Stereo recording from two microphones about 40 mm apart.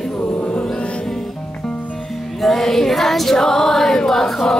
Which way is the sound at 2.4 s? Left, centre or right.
Centre.